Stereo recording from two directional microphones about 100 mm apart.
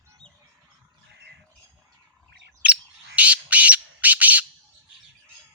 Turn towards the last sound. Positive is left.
turn(degrees=-15)  # may be behind; listen again after turning